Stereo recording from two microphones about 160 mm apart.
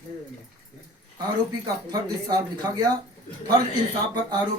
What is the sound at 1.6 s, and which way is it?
Speech, 25° right (ahead or behind).